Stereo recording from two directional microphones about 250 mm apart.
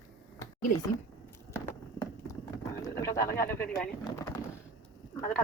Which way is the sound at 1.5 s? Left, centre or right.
Centre.